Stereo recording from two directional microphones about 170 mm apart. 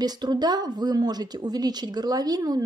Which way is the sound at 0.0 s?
25° right (ahead or behind).